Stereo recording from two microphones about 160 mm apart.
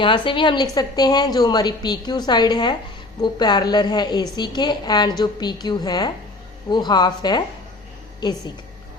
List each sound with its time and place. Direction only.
0.0 s a woman's voice: 30° left (ahead or behind)